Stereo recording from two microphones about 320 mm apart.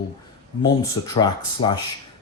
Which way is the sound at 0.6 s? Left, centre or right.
Centre.